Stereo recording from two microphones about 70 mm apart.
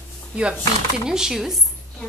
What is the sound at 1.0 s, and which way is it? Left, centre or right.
Speech, centre.